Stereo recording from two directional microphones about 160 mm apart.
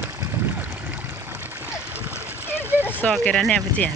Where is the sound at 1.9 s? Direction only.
10° right (ahead or behind).